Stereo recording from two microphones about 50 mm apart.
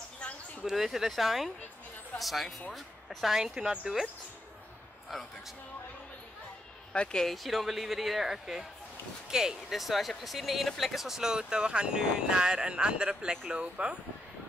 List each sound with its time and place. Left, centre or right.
0.7 s speech: centre
6.9 s speech: centre
7.2 s speech: centre; by 13.9 s right